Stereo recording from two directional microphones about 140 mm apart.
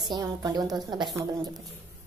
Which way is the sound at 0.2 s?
25° right (ahead or behind).